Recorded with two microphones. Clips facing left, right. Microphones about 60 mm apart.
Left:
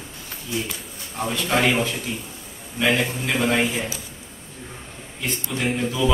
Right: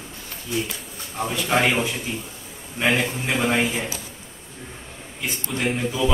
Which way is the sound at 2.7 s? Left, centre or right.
Right.